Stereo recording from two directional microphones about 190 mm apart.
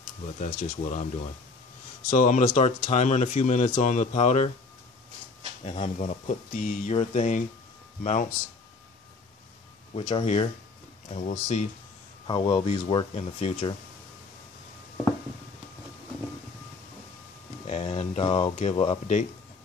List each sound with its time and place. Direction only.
0.4 s speech: 40° left (ahead or behind)
2.0 s speech: 40° left (ahead or behind)
5.7 s speech: 35° left (ahead or behind)
9.9 s speech: 30° left (ahead or behind)
17.6 s speech: 35° left (ahead or behind)